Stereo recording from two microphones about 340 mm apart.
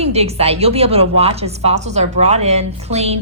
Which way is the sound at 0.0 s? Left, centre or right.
Centre.